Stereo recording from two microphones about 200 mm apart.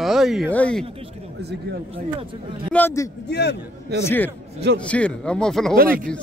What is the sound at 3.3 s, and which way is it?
Speech, 55° left (ahead or behind).